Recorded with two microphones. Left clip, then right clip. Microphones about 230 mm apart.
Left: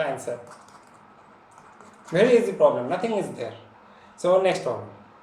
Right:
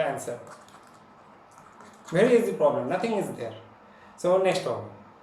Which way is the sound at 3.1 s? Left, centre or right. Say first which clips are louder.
Left 2 dB; centre.